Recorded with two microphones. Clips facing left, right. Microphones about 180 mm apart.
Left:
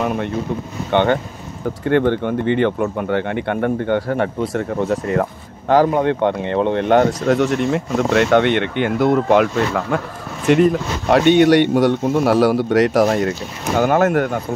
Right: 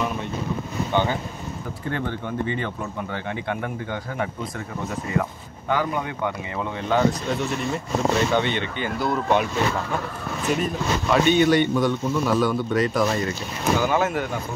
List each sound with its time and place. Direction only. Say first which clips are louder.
0.0 s speech: left 6 dB; 55° left (ahead or behind)
0.9 s speech: left 8 dB; 65° left (ahead or behind)
5.7 s speech: left 10 dB; 80° left
13.7 s speech: left 9 dB; 60° left (ahead or behind)